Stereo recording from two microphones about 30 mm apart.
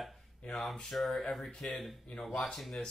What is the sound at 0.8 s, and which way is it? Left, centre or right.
Speech, centre.